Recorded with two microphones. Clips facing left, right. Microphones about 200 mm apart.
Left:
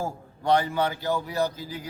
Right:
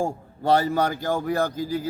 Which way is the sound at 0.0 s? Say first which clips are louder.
Right 4 dB; 35° right (ahead or behind).